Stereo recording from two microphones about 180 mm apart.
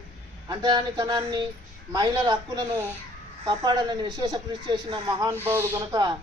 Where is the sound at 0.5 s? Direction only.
25° right (ahead or behind).